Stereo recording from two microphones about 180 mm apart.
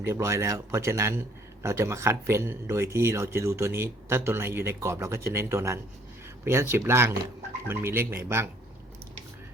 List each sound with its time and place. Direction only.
0.0 s speech: 15° right (ahead or behind)